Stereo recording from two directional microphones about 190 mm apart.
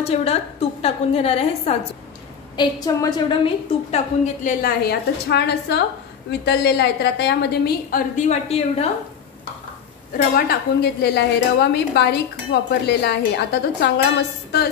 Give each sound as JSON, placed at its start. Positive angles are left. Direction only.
{"t": 0.0, "sound": "a woman's voice", "side_deg": 30}
{"t": 2.5, "sound": "a woman's voice", "side_deg": 20}
{"t": 8.2, "sound": "a woman's voice", "side_deg": 35}
{"t": 10.1, "sound": "a woman's voice", "side_deg": 55}